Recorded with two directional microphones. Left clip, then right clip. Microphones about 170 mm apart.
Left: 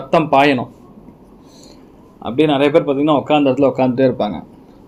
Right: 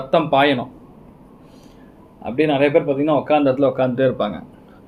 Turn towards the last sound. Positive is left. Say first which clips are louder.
# left 3 dB
turn(degrees=20)  # may be behind; listen again after turning